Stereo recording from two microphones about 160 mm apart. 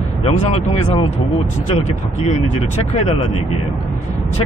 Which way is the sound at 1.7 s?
45° left (ahead or behind).